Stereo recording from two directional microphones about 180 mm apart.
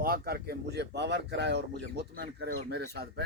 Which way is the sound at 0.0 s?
60° right (ahead or behind).